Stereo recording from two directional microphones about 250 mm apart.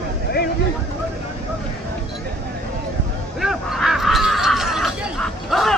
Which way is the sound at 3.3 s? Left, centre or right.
Centre.